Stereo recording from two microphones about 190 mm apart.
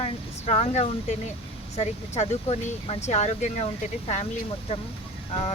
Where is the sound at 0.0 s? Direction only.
35° left (ahead or behind).